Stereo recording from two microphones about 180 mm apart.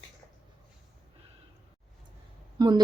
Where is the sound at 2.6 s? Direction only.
25° right (ahead or behind).